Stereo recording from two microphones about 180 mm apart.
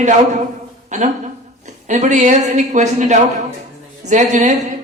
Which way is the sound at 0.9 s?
45° right (ahead or behind).